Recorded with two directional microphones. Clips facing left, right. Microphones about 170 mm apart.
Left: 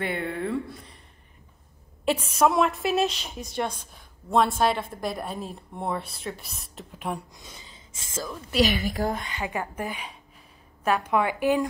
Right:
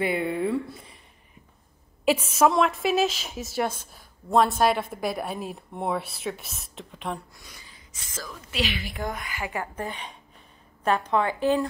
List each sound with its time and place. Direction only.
0.0 s a sound: 10° right (ahead or behind)
2.0 s a woman's voice: 5° right (ahead or behind)
7.4 s speech: 25° left (ahead or behind)
8.5 s a woman's voice: 40° left (ahead or behind); by 11.6 s 10° left (ahead or behind)